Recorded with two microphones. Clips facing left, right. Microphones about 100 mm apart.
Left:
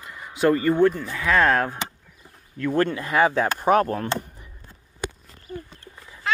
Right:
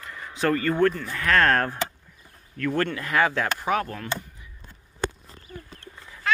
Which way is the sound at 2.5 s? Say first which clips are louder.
Left 3 dB; 20° left (ahead or behind).